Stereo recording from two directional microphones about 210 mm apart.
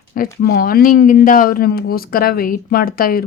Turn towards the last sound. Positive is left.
turn(degrees=45)  # may be behind; listen again after turning